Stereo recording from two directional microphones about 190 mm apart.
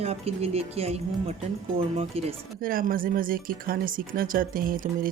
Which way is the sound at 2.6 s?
50° right (ahead or behind).